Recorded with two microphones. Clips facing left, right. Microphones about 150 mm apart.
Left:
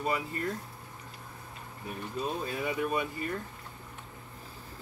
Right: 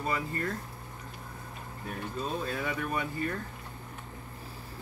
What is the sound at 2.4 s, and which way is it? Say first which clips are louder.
Speech: left 1 dB; 20° left (ahead or behind).